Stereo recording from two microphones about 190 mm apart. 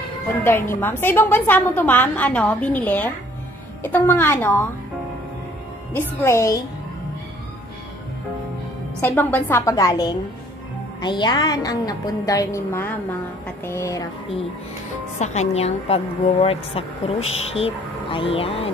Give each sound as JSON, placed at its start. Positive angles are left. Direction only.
{"t": 0.4, "sound": "a woman's voice", "side_deg": 10}
{"t": 5.9, "sound": "a woman's voice", "side_deg": 10}
{"t": 9.0, "sound": "a woman's voice", "side_deg": 10}
{"t": 15.1, "sound": "a woman's voice", "side_deg": 35}